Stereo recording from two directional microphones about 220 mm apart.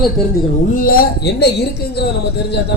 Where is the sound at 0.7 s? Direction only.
40° left (ahead or behind).